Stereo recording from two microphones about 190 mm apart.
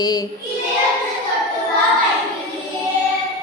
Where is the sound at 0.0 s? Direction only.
20° left (ahead or behind).